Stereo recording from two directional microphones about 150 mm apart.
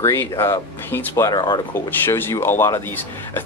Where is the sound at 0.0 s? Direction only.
15° left (ahead or behind).